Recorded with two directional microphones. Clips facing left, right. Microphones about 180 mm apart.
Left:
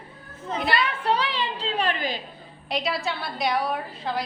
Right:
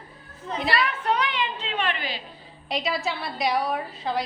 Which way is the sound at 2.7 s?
Centre (ahead or behind).